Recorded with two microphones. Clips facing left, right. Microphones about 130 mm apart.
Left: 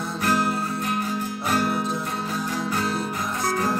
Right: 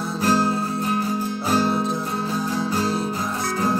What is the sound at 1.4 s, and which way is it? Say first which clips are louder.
Music: right 3 dB; 30° right (ahead or behind).